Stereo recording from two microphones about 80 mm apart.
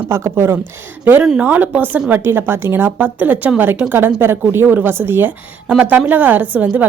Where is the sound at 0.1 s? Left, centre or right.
Right.